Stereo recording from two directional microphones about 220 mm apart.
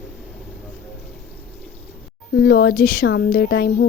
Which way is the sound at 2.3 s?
45° left (ahead or behind).